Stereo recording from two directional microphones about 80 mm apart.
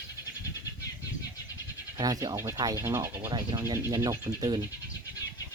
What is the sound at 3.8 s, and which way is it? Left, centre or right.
Speech, right.